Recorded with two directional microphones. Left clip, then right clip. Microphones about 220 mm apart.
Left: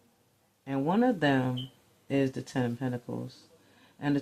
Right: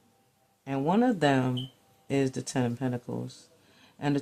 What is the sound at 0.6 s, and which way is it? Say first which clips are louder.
Speech: right 1 dB; 25° right (ahead or behind).